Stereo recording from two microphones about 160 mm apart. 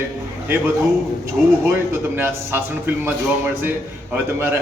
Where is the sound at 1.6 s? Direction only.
15° right (ahead or behind).